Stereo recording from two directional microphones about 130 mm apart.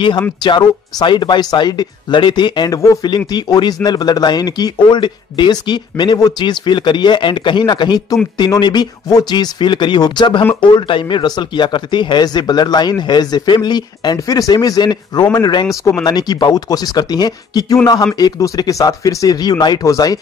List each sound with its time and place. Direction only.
0.4 s speech: 35° left (ahead or behind)